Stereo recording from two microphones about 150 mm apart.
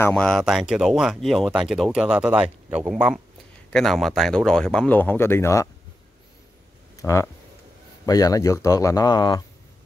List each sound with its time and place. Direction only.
0.1 s speech: 5° left (ahead or behind); by 5.7 s 20° left (ahead or behind)
7.0 s speech: 20° left (ahead or behind)